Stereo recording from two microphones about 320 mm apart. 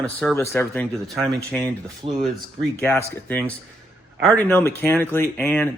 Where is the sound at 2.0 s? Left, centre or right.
Centre.